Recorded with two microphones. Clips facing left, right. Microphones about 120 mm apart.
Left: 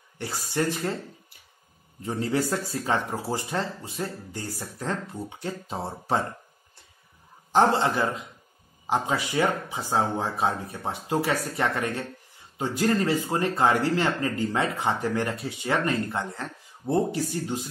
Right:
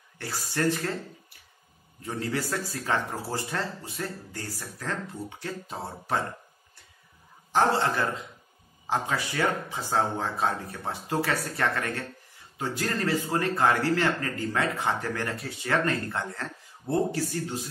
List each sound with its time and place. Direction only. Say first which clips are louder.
0.2 s speech: left 1 dB; 20° left (ahead or behind)
2.0 s speech: left 4 dB; 25° left (ahead or behind)
7.5 s speech: left 3 dB; 20° left (ahead or behind)